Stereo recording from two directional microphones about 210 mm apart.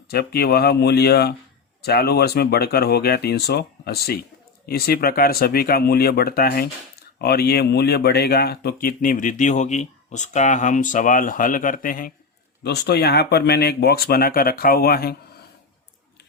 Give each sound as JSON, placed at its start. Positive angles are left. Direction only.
{"t": 0.1, "sound": "speech", "side_deg": 50}